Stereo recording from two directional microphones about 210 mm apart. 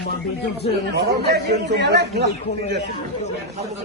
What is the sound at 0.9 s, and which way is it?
Speech, 55° right (ahead or behind).